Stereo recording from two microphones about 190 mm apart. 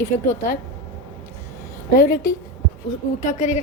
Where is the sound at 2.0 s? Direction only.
50° left (ahead or behind).